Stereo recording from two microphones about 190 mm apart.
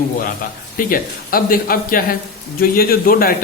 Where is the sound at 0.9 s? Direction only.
50° left (ahead or behind).